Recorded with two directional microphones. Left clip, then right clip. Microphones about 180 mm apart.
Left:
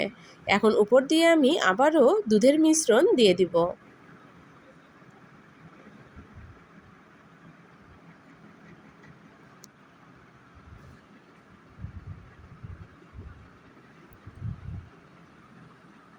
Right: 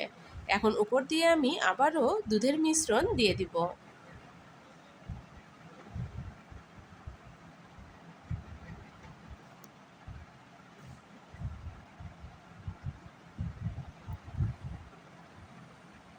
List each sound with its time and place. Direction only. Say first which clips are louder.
0.0 s a woman's voice: left 8 dB; 25° left (ahead or behind)